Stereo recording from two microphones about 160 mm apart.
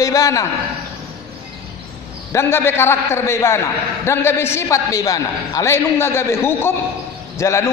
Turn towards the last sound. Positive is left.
turn(degrees=20)  # may be behind; listen again after turning